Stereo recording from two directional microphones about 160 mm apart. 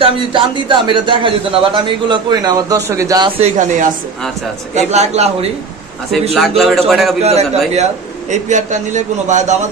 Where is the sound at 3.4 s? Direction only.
50° right (ahead or behind).